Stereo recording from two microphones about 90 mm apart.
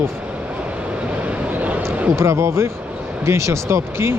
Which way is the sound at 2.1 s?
30° right (ahead or behind).